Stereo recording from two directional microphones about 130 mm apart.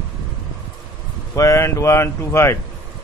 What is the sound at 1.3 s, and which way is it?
Speech, 25° left (ahead or behind).